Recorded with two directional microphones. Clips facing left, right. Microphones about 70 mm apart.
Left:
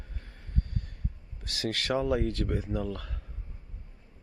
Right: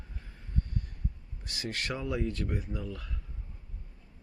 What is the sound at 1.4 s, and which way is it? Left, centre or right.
Speech, left.